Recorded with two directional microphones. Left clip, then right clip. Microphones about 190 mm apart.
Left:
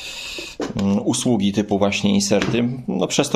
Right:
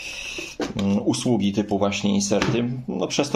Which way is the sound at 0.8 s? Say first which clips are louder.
Left 3 dB; 20° left (ahead or behind).